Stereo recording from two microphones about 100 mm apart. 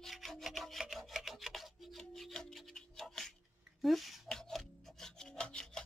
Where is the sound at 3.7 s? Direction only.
Centre (ahead or behind).